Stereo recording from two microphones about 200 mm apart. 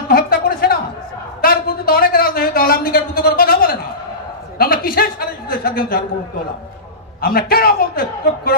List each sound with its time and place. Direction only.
0.1 s music: 50° left (ahead or behind)
1.4 s a sound: 50° left (ahead or behind)
7.2 s a man's voice: 50° left (ahead or behind)